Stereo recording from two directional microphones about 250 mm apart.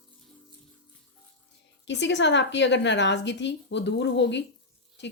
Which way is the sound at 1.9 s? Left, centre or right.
Left.